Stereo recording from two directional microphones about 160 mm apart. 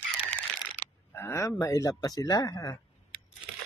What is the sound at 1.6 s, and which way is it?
Speech, 20° left (ahead or behind).